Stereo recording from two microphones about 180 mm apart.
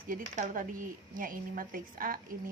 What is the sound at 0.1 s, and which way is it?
A woman's voice, 50° right (ahead or behind).